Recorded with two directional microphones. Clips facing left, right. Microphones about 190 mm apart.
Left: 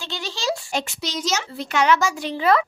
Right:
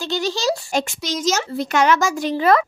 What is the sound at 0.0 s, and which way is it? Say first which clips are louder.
Speech: right 7 dB; 40° right (ahead or behind).